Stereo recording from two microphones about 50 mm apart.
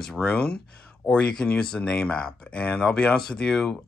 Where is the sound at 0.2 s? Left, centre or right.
Left.